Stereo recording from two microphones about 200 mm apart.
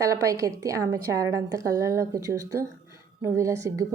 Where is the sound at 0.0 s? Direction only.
15° right (ahead or behind).